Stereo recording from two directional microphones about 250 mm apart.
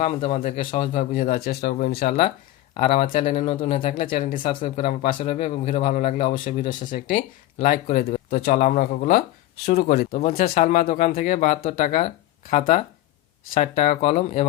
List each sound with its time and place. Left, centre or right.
0.0 s speech: left